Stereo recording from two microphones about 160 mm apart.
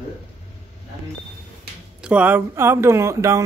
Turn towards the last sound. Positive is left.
turn(degrees=-20)  # may be behind; listen again after turning